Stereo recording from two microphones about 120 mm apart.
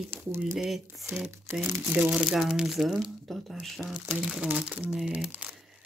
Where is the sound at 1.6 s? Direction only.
20° right (ahead or behind).